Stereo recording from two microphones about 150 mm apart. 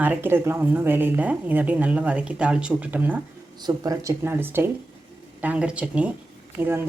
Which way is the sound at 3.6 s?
25° right (ahead or behind).